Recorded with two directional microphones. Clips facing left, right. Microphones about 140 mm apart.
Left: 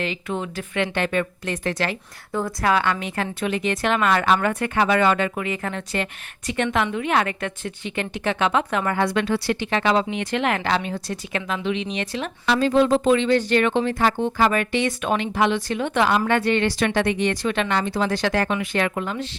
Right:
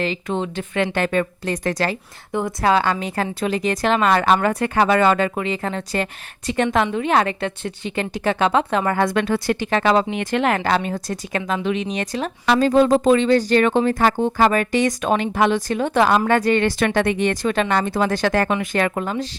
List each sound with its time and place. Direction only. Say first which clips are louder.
0.0 s a woman's voice: right 4 dB; 35° right (ahead or behind)
2.3 s a woman's voice: right 3 dB; 20° right (ahead or behind)
9.0 s speech: right 2 dB; 45° right (ahead or behind)